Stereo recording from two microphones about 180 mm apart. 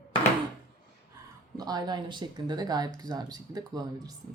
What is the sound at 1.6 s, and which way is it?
Speech, 20° right (ahead or behind).